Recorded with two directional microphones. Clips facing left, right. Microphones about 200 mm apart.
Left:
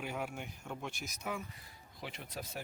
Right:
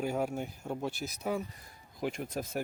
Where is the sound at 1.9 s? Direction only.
45° right (ahead or behind).